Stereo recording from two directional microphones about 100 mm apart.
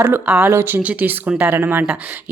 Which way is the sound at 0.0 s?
20° right (ahead or behind).